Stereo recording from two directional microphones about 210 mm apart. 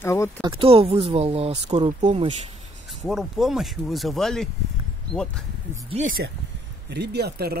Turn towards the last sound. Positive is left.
turn(degrees=-50)  # may be behind; listen again after turning